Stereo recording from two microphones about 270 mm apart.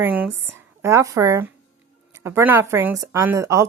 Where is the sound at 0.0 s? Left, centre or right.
Centre.